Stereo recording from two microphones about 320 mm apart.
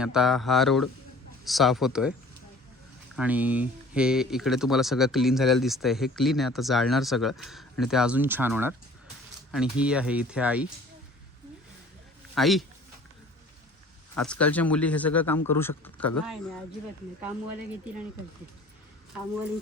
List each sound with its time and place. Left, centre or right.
0.0 s speech: centre
3.2 s speech: centre
12.3 s speech: centre
14.2 s speech: centre